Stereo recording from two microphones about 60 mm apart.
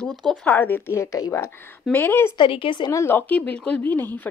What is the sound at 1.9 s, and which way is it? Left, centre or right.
A woman's voice, left.